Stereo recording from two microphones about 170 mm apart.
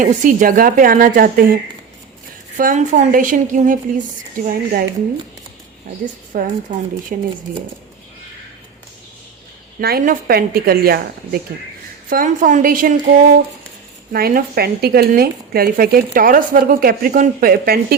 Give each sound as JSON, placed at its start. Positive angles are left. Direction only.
{"t": 0.0, "sound": "speech", "side_deg": -50}
{"t": 2.6, "sound": "a woman's voice", "side_deg": -50}
{"t": 6.3, "sound": "a woman's voice", "side_deg": -60}
{"t": 9.8, "sound": "a woman's voice", "side_deg": -60}
{"t": 14.1, "sound": "speech", "side_deg": -60}